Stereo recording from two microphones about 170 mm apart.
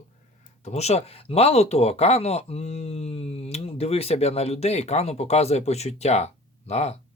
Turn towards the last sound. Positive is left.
turn(degrees=40)  # may be behind; listen again after turning